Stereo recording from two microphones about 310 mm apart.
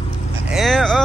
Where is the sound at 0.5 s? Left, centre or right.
Centre.